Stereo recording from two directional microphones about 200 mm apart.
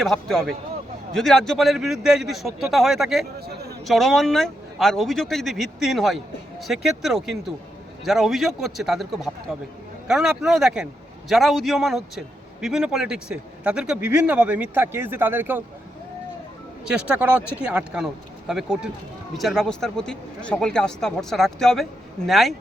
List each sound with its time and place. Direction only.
0.0 s speech: centre (ahead or behind)
3.4 s a sound: 50° right (ahead or behind)
3.8 s a man's voice: centre (ahead or behind)
16.8 s speech: 5° right (ahead or behind)